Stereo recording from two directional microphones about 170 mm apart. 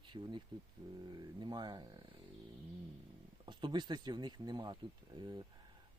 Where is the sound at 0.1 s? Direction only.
30° right (ahead or behind).